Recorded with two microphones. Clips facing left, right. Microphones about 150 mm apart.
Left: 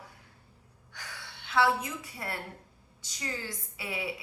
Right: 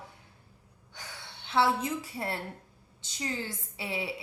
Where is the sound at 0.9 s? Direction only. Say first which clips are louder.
Even; 25° right (ahead or behind).